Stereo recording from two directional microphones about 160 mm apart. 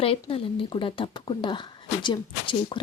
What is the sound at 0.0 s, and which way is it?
A woman's voice, 35° left (ahead or behind).